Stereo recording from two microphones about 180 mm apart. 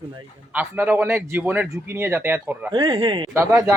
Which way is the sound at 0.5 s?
10° right (ahead or behind).